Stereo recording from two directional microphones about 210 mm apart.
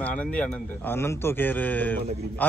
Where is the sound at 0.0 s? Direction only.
5° left (ahead or behind).